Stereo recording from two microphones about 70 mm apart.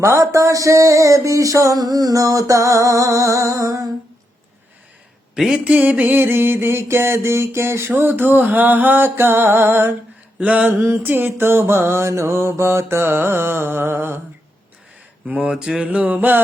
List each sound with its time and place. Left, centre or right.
0.0 s music: right
1.8 s music: right
5.3 s a sound: centre; by 9.9 s right
10.4 s mantra: centre
10.7 s a sound: right
15.3 s mantra: centre